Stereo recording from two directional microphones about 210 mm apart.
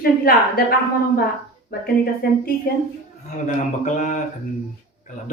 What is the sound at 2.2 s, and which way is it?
Speech, 45° left (ahead or behind).